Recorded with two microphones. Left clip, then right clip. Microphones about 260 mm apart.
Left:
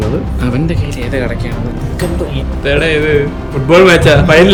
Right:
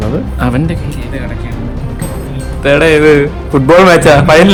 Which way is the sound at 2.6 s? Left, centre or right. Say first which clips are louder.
Right 5 dB; centre.